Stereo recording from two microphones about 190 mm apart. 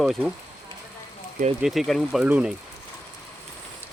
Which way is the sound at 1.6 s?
Centre (ahead or behind).